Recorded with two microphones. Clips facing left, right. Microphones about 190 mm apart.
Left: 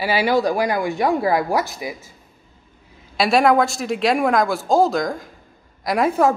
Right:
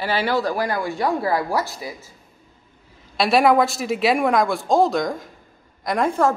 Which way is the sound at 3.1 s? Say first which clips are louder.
Left 1 dB; centre (ahead or behind).